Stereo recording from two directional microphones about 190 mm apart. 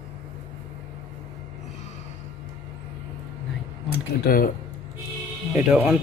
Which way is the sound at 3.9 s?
50° left (ahead or behind).